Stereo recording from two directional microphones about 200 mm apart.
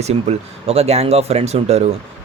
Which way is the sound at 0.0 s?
30° right (ahead or behind).